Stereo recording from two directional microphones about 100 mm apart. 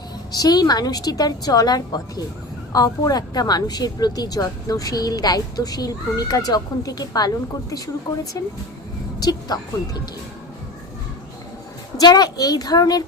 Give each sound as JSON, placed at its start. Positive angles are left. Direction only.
{"t": 0.3, "sound": "a woman's voice", "side_deg": 40}
{"t": 11.9, "sound": "a woman's voice", "side_deg": 40}